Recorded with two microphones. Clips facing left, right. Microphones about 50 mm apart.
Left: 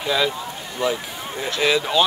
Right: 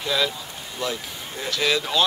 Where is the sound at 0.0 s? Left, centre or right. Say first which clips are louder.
Left 3 dB; centre.